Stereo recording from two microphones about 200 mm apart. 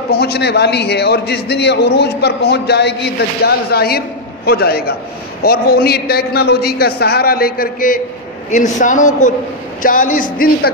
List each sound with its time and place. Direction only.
0.1 s a man's voice: 55° left (ahead or behind)